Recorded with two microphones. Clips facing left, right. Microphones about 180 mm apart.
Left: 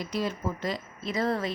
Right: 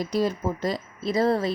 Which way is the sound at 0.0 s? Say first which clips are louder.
Right 6 dB; 40° right (ahead or behind).